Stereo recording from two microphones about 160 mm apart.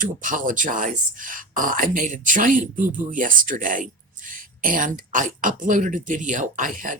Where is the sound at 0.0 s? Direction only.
55° right (ahead or behind).